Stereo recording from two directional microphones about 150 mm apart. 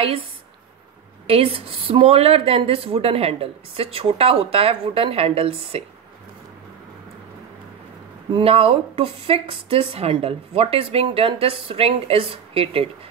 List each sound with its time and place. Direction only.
1.2 s speech: 40° right (ahead or behind)
8.3 s speech: 35° right (ahead or behind)